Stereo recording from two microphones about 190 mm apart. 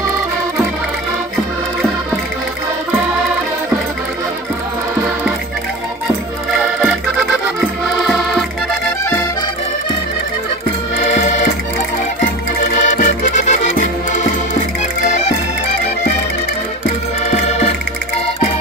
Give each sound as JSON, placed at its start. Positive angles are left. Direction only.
{"t": 8.0, "sound": "music", "side_deg": 0}
{"t": 12.8, "sound": "music", "side_deg": 45}
{"t": 15.0, "sound": "music", "side_deg": 40}